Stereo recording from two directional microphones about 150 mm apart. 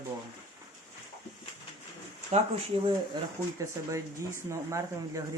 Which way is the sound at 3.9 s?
20° right (ahead or behind).